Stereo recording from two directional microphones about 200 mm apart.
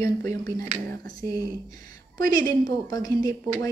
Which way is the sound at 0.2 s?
15° left (ahead or behind).